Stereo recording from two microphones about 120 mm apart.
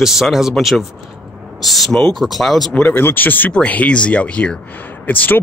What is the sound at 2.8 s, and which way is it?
Speech, 15° left (ahead or behind).